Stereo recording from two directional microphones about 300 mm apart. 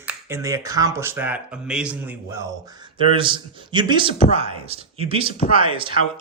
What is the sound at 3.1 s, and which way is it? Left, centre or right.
Speech, centre.